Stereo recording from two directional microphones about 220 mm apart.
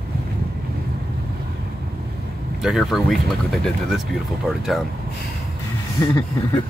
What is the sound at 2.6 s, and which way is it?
Speech, centre (ahead or behind).